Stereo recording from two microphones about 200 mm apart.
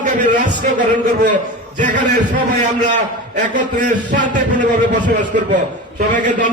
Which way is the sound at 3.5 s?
40° right (ahead or behind).